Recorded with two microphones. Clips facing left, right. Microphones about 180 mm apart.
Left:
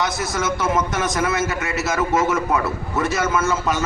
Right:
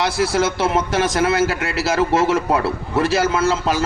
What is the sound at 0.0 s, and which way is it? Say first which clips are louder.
A man's voice: right 5 dB; 30° right (ahead or behind).